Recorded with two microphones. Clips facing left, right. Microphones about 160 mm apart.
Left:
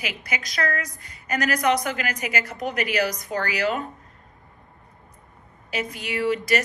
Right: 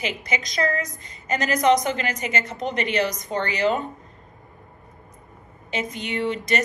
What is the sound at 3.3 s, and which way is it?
Speech, 5° left (ahead or behind).